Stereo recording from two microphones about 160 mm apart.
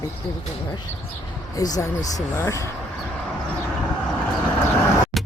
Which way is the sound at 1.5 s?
20° left (ahead or behind).